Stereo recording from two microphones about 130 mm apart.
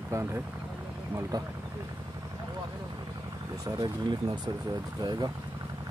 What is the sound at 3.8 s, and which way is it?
Speech, 35° right (ahead or behind).